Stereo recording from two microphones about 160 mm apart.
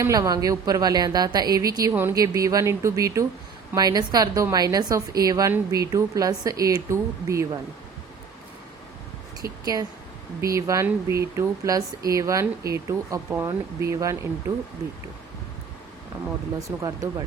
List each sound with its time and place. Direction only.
0.0 s speech: 25° right (ahead or behind)
9.4 s speech: 25° right (ahead or behind)
16.6 s speech: 20° right (ahead or behind)